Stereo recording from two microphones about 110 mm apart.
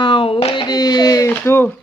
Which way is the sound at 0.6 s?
35° left (ahead or behind).